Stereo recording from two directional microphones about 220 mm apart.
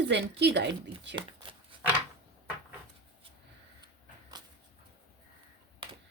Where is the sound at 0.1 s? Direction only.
50° right (ahead or behind).